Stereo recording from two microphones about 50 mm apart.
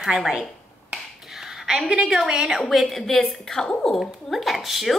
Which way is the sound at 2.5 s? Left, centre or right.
Centre.